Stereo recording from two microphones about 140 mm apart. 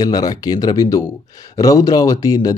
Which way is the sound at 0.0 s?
30° left (ahead or behind).